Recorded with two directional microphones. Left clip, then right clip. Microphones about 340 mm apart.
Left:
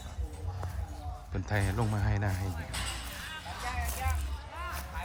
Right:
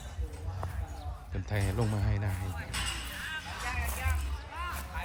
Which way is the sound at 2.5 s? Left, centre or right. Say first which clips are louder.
Right 2 dB; left.